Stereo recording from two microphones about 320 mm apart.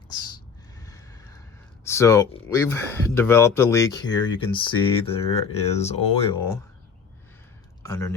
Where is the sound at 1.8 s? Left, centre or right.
Centre.